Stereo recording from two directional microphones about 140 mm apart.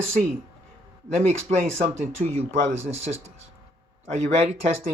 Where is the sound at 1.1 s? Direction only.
50° right (ahead or behind).